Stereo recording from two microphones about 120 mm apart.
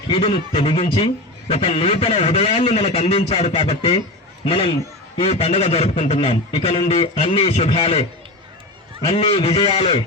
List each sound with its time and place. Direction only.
0.1 s a man's voice: 50° left (ahead or behind)